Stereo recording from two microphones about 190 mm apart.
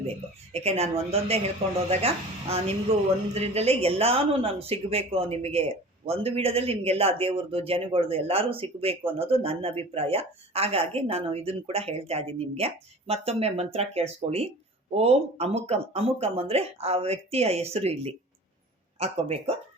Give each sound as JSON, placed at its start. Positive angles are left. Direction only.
{"t": 0.5, "sound": "a man's voice", "side_deg": -35}